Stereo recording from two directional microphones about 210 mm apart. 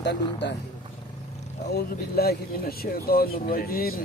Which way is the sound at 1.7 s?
50° left (ahead or behind).